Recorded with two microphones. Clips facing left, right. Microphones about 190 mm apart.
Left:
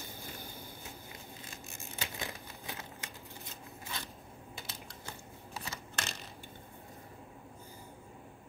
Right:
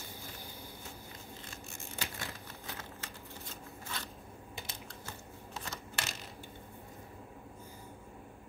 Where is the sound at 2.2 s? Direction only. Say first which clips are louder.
Left 2 dB; 15° left (ahead or behind).